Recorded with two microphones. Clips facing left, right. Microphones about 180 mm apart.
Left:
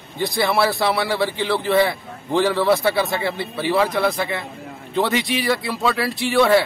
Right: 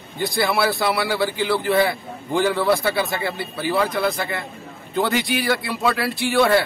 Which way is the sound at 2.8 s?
25° left (ahead or behind).